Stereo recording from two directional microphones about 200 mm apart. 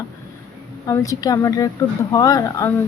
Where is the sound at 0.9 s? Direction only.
15° left (ahead or behind).